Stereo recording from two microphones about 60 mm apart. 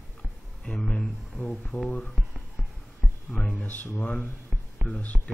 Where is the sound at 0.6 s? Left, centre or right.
Centre.